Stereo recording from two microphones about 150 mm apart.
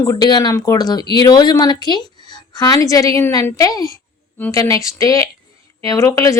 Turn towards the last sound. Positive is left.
turn(degrees=20)  # may be behind; listen again after turning